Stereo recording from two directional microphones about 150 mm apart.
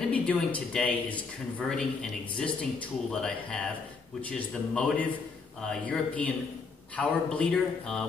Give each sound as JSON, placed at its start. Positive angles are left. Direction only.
{"t": 0.1, "sound": "a man's voice", "side_deg": 10}